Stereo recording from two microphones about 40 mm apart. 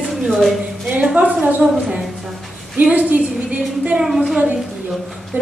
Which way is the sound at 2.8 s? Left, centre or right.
Right.